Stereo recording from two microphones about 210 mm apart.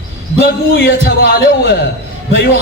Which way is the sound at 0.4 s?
50° left (ahead or behind).